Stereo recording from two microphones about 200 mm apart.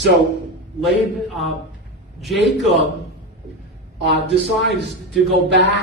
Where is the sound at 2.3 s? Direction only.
60° right (ahead or behind).